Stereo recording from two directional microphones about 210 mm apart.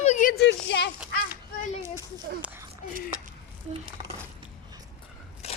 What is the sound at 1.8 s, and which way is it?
Speech, 15° right (ahead or behind).